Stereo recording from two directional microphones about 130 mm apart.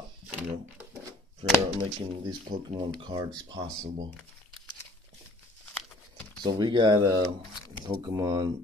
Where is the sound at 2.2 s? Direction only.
35° right (ahead or behind).